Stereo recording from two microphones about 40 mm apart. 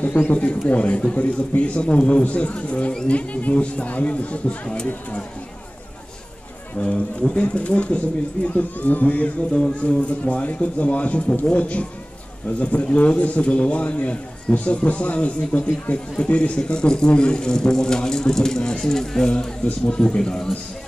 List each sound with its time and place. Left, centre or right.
0.0 s a man's voice: left
6.8 s a man's voice: left
9.5 s a man's voice: left; by 19.3 s centre
19.3 s a man's voice: left